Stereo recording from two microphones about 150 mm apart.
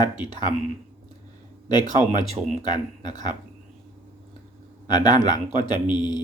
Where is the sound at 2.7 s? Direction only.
30° left (ahead or behind).